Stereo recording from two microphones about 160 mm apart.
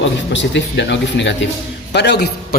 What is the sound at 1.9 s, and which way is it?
Speech, 90° left.